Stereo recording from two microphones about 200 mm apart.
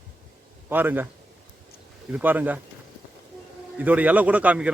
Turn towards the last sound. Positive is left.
turn(degrees=-5)  # may be behind; listen again after turning